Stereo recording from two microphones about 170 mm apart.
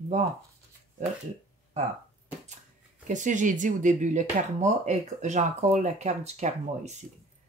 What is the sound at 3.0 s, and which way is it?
Speech, 45° right (ahead or behind).